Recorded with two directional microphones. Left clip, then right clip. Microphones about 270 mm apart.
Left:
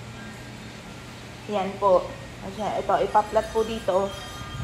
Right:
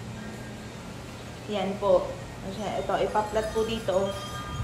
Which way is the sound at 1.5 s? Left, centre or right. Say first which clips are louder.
Left 3 dB; left.